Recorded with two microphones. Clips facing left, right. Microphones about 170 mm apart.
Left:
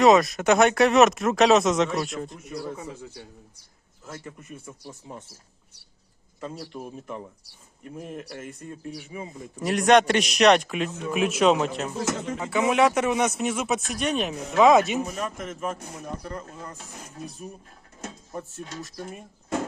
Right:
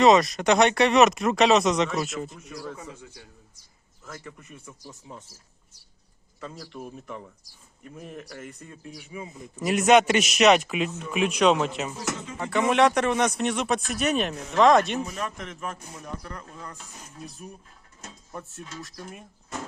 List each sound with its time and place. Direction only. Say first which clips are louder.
0.0 s speech: left 1 dB; centre (ahead or behind)
2.9 s a man's voice: left 5 dB; 30° left (ahead or behind)
9.4 s speech: right 1 dB; 5° right (ahead or behind)
15.0 s a man's voice: left 2 dB; 45° left (ahead or behind)
16.0 s speech: left 3 dB; 30° left (ahead or behind)
18.6 s a man's voice: left 4 dB; 45° left (ahead or behind)